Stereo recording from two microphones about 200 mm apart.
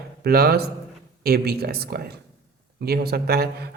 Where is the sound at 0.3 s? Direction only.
50° right (ahead or behind).